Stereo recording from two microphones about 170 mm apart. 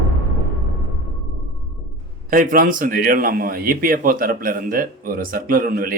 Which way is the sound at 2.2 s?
55° right (ahead or behind).